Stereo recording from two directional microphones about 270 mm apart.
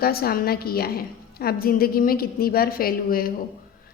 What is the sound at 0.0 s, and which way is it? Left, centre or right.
A woman's voice, left.